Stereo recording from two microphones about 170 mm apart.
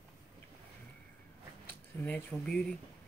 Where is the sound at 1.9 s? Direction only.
15° left (ahead or behind).